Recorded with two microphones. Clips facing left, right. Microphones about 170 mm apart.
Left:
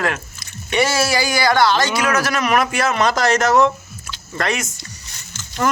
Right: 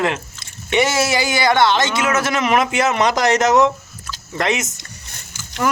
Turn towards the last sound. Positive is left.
turn(degrees=-10)  # may be behind; listen again after turning